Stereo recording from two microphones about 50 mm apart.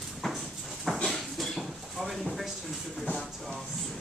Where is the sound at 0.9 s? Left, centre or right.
Centre.